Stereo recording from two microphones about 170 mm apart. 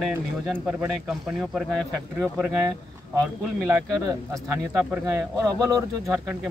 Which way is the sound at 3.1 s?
15° right (ahead or behind).